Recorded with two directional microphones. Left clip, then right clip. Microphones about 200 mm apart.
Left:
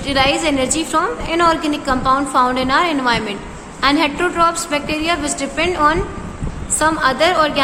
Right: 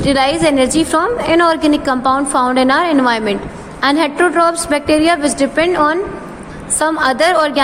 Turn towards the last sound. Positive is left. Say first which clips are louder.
# right 2 dB
turn(degrees=-30)  # may be behind; listen again after turning